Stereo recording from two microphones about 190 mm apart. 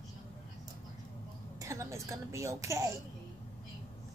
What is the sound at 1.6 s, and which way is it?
A woman's voice, 15° right (ahead or behind).